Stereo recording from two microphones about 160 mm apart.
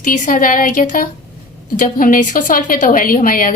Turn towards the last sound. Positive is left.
turn(degrees=60)  # may be behind; listen again after turning